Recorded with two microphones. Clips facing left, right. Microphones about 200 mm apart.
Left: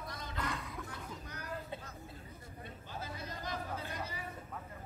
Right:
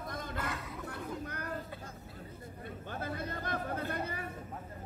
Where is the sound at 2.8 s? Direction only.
55° right (ahead or behind).